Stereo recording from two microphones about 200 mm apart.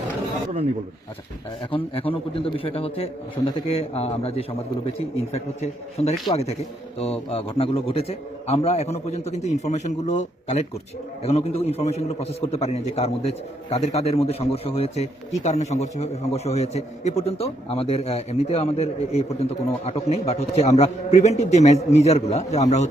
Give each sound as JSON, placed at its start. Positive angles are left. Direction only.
{"t": 1.7, "sound": "a man's voice", "side_deg": 25}